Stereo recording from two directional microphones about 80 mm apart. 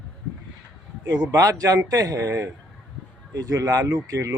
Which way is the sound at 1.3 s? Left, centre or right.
Right.